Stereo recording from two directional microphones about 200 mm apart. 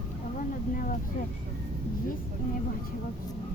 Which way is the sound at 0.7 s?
45° left (ahead or behind).